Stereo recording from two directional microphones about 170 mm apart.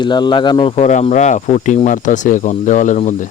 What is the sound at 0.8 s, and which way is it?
Speech, 40° left (ahead or behind).